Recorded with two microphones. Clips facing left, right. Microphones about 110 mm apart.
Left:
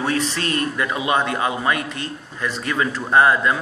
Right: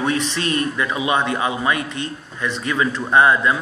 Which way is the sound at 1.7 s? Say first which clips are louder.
Right 1 dB; 25° right (ahead or behind).